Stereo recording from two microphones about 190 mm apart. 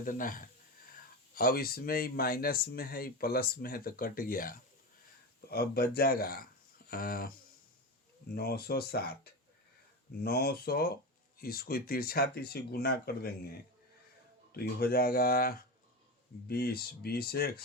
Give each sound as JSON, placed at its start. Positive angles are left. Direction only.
{"t": 0.0, "sound": "speech", "side_deg": 45}
{"t": 10.2, "sound": "speech", "side_deg": 55}